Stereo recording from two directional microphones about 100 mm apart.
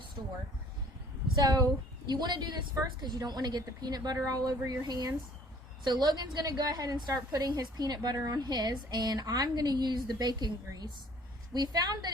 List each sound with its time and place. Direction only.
0.2 s speech: 40° right (ahead or behind)
1.4 s a woman's voice: 40° right (ahead or behind)